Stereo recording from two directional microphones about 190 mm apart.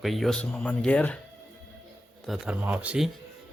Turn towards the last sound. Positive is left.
turn(degrees=-5)  # may be behind; listen again after turning